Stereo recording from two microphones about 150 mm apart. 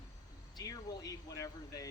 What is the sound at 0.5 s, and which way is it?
Speech, 25° left (ahead or behind).